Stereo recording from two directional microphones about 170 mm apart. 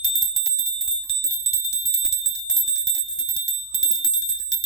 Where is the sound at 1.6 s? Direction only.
35° right (ahead or behind).